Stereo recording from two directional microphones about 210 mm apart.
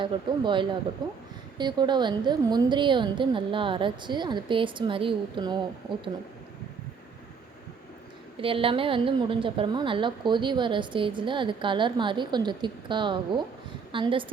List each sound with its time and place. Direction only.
0.0 s a woman's voice: 20° right (ahead or behind)
8.4 s a woman's voice: 25° right (ahead or behind)